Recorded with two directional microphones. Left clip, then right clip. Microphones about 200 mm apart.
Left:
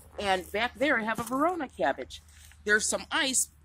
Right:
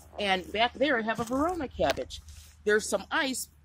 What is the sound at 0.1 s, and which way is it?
Speech, 35° right (ahead or behind).